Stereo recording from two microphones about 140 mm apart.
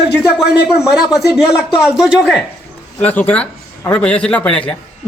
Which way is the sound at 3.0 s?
10° left (ahead or behind).